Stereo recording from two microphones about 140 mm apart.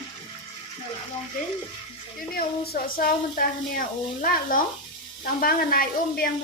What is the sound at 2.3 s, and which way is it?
Speech, 90° left.